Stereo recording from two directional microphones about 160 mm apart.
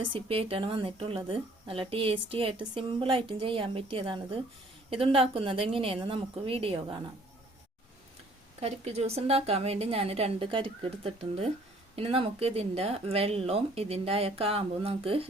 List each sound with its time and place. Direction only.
0.0 s a woman's voice: 35° right (ahead or behind)
8.6 s a woman's voice: 40° right (ahead or behind)